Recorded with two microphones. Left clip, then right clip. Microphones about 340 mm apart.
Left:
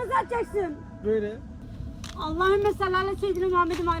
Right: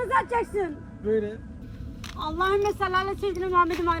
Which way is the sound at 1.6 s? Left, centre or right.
Right.